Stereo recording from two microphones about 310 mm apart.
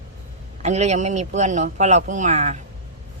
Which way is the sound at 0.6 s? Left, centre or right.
Right.